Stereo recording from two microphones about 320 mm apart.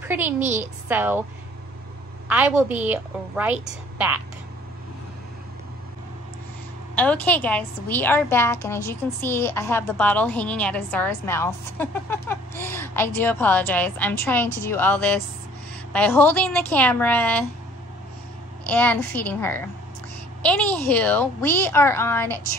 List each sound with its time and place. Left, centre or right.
0.0 s a woman's voice: centre
2.2 s a woman's voice: centre
7.0 s a woman's voice: centre
18.7 s a woman's voice: centre